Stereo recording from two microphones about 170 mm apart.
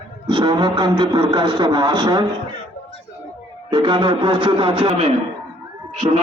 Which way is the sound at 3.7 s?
25° right (ahead or behind).